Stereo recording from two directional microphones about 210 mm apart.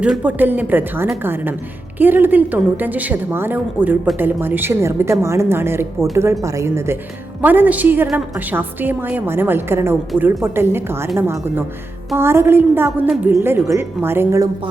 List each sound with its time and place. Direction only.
0.0 s a woman's voice: 5° right (ahead or behind)